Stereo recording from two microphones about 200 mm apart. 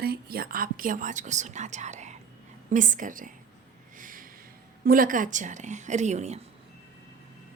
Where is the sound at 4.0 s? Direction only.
40° right (ahead or behind).